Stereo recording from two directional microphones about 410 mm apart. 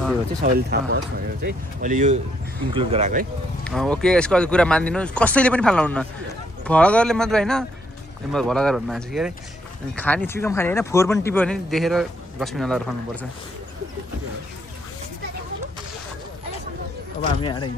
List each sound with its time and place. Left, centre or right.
0.4 s speech: right
3.6 s speech: centre
17.4 s speech: centre